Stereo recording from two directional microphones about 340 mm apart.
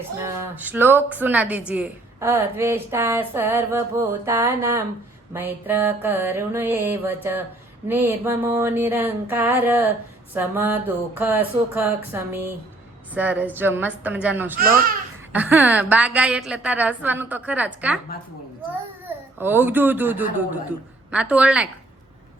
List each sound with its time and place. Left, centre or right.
0.2 s a woman's voice: centre
14.6 s speech: right
15.3 s a woman's voice: centre
19.4 s a woman's voice: centre